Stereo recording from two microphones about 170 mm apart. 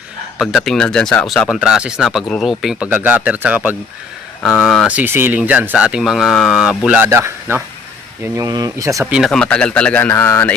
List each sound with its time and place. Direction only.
0.3 s speech: centre (ahead or behind); by 9.0 s 20° right (ahead or behind)
9.0 s speech: 5° right (ahead or behind)
9.3 s a man's voice: 5° left (ahead or behind)